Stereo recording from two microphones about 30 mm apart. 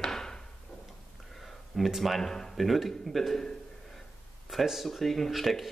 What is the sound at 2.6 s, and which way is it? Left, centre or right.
Speech, centre.